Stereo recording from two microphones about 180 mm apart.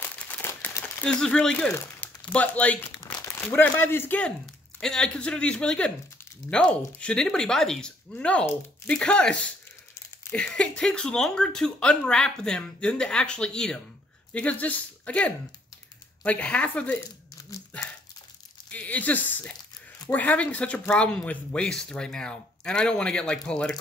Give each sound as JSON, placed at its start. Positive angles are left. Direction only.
{"t": 0.0, "sound": "crumpling", "side_deg": 10}
{"t": 4.7, "sound": "speech", "side_deg": 5}
{"t": 18.7, "sound": "speech", "side_deg": 5}